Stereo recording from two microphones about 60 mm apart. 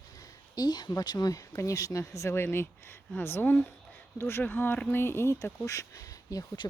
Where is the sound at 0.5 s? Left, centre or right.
Left.